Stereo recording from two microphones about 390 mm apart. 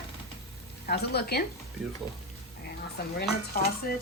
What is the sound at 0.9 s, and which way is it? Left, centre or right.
Speech, left.